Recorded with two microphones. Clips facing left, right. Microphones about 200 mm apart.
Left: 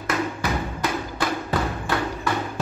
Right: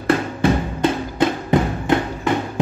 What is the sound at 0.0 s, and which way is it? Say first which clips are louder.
Music: right 8 dB; 30° right (ahead or behind).